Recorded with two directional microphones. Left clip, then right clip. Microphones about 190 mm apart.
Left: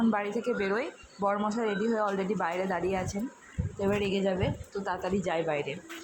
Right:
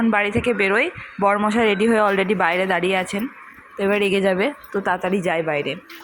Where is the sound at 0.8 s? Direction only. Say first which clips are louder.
Right 12 dB; 30° right (ahead or behind).